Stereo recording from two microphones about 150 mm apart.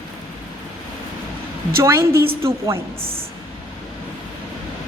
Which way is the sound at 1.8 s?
15° right (ahead or behind).